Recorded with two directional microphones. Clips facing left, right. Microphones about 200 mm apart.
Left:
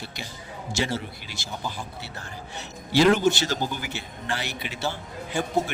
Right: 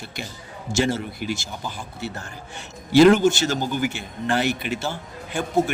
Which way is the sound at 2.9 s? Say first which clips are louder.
Right 5 dB; 50° right (ahead or behind).